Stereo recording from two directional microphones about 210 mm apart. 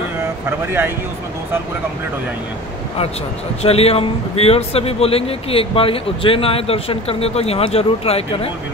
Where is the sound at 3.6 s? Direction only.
30° left (ahead or behind).